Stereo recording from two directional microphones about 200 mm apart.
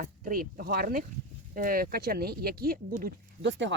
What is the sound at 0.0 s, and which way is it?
Speech, 45° right (ahead or behind).